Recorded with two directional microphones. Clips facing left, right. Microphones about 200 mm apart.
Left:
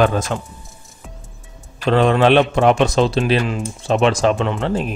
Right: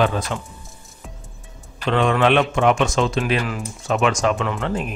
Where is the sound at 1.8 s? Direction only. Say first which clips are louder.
Left 4 dB; 35° left (ahead or behind).